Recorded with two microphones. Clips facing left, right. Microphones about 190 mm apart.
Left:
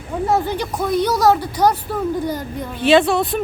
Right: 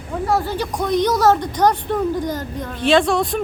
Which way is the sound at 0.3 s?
20° left (ahead or behind).